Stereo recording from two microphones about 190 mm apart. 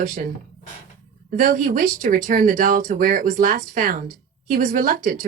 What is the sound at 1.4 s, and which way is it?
Speech, 45° right (ahead or behind).